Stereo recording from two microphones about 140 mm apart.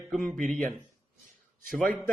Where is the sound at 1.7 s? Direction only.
5° left (ahead or behind).